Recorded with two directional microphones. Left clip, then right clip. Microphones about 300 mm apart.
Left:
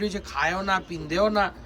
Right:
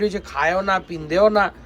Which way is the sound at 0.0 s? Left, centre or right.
Centre.